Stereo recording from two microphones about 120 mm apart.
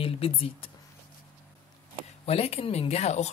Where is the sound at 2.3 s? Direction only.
55° left (ahead or behind).